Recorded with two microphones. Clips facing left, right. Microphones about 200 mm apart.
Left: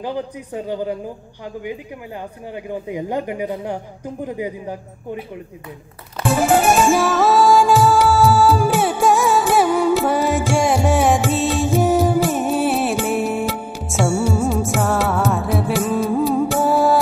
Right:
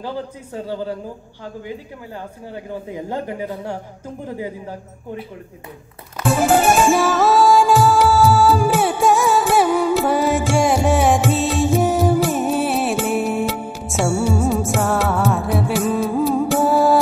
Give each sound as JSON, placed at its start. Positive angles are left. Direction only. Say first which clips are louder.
{"t": 0.0, "sound": "a man's voice", "louder": "left 2 dB", "side_deg": 15}
{"t": 2.5, "sound": "a man's voice", "louder": "left 3 dB", "side_deg": 15}
{"t": 6.2, "sound": "music", "louder": "even", "side_deg": 0}